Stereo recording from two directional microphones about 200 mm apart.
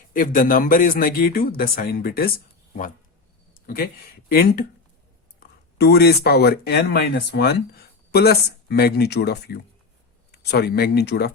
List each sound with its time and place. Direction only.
0.1 s speech: 40° left (ahead or behind)
4.3 s speech: 50° left (ahead or behind)
5.7 s speech: 55° left (ahead or behind)